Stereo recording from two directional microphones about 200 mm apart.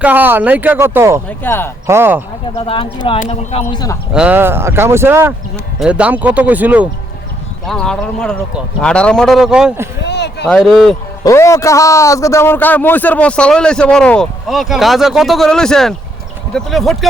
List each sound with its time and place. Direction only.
0.0 s speech: 10° right (ahead or behind)
1.5 s speech: 10° left (ahead or behind)
1.9 s speech: 10° right (ahead or behind)
2.6 s speech: 25° left (ahead or behind)
4.1 s speech: 5° right (ahead or behind)
7.7 s a man's voice: 5° left (ahead or behind)
10.0 s a sound: 60° left (ahead or behind)
10.4 s a man's voice: 5° left (ahead or behind)
11.2 s a man's voice: 15° left (ahead or behind)